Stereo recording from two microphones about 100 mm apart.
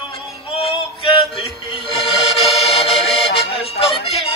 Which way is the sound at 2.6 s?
85° left.